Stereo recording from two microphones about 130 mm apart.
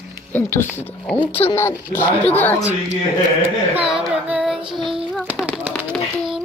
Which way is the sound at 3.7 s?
5° right (ahead or behind).